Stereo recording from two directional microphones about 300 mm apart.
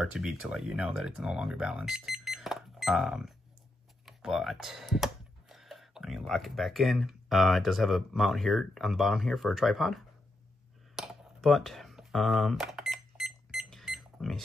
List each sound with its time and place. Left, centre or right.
0.0 s speech: centre
11.0 s typing: centre